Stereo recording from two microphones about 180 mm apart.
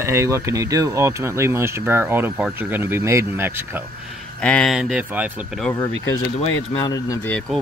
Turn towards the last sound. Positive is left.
turn(degrees=20)  # may be behind; listen again after turning